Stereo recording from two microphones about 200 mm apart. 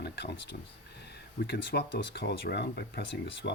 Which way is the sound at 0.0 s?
55° left (ahead or behind).